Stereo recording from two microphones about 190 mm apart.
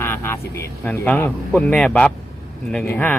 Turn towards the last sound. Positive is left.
turn(degrees=10)  # may be behind; listen again after turning